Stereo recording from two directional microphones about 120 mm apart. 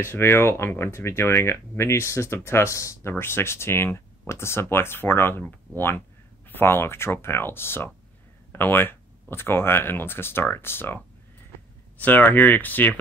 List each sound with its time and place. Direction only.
0.0 s speech: 20° left (ahead or behind)
12.0 s speech: 15° left (ahead or behind)